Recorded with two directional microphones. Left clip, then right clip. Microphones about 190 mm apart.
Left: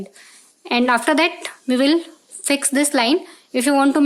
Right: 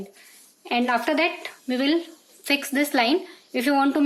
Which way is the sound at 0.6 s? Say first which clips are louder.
Left 6 dB; 35° left (ahead or behind).